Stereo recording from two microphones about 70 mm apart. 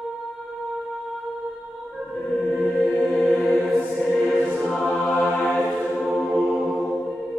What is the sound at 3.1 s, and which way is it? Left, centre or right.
Music, centre.